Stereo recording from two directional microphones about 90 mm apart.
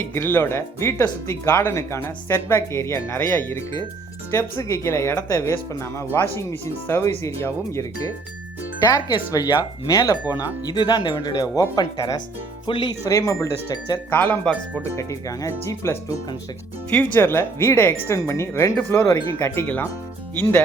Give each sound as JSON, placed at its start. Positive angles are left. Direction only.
{"t": 0.0, "sound": "speech", "side_deg": 25}
{"t": 8.9, "sound": "speech", "side_deg": 45}
{"t": 12.6, "sound": "speech", "side_deg": 65}
{"t": 12.9, "sound": "speech", "side_deg": 35}
{"t": 14.1, "sound": "speech", "side_deg": 15}
{"t": 14.8, "sound": "speech", "side_deg": 35}
{"t": 16.9, "sound": "speech", "side_deg": 20}
{"t": 18.8, "sound": "speech", "side_deg": 20}